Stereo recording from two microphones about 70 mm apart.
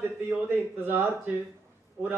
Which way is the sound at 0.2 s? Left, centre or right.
Right.